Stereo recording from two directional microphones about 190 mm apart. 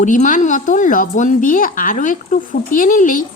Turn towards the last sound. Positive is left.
turn(degrees=45)  # may be behind; listen again after turning